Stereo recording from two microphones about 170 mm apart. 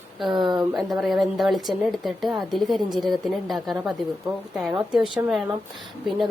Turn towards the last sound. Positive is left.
turn(degrees=0)  # may be behind; listen again after turning